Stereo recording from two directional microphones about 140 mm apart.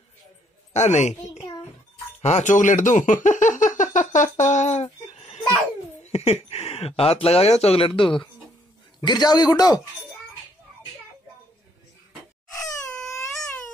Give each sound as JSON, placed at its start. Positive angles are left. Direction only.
{"t": 0.7, "sound": "speech", "side_deg": 55}
{"t": 5.1, "sound": "a sound", "side_deg": 50}
{"t": 6.0, "sound": "a man's voice", "side_deg": 50}